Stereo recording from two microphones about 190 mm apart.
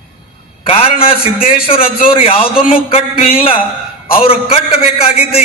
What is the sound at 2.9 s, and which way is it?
A man's voice, 30° left (ahead or behind).